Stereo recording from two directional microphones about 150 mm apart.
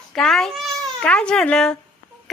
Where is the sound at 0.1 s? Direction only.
Centre (ahead or behind).